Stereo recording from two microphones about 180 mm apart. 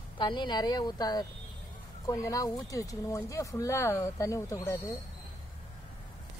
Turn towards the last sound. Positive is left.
turn(degrees=15)  # may be behind; listen again after turning